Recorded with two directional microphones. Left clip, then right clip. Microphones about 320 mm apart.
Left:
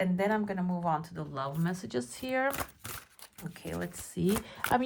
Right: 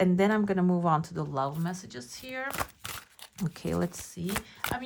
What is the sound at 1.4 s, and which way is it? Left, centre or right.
Speech, centre.